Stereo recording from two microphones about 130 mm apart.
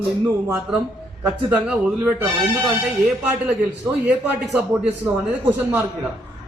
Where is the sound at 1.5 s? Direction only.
10° right (ahead or behind).